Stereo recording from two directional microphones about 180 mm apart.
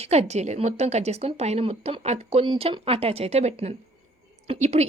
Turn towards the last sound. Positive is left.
turn(degrees=-35)  # may be behind; listen again after turning